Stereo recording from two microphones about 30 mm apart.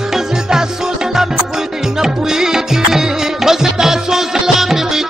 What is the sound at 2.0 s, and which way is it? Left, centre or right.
Music, centre.